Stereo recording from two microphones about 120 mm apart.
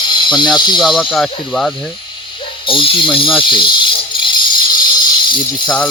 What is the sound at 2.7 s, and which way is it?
Speech, 45° left (ahead or behind).